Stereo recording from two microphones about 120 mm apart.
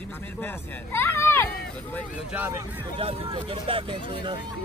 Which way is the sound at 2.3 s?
15° right (ahead or behind).